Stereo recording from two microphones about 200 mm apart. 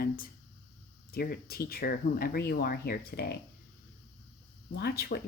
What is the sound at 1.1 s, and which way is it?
A woman's voice, 50° left (ahead or behind).